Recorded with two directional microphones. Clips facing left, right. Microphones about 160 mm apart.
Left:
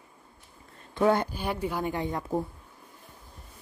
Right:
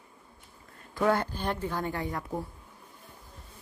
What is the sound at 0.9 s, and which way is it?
Speech, 20° left (ahead or behind).